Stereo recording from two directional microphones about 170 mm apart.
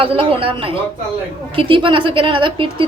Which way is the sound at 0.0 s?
35° right (ahead or behind).